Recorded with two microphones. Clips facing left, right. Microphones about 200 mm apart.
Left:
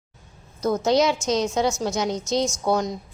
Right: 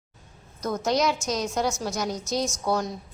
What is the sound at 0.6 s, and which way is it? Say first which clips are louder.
A woman's voice: left 5 dB; 25° left (ahead or behind).